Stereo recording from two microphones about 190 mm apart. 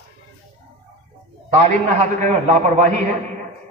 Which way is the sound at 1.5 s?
35° right (ahead or behind).